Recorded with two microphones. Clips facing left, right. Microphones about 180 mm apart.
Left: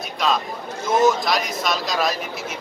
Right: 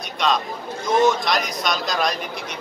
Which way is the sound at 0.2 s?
5° left (ahead or behind).